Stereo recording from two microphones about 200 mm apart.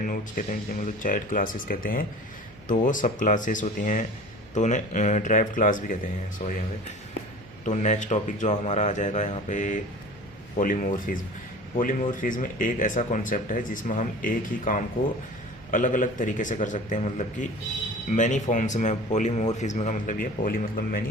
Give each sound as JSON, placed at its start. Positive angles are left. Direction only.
{"t": 0.0, "sound": "speech", "side_deg": 40}
{"t": 7.6, "sound": "speech", "side_deg": 35}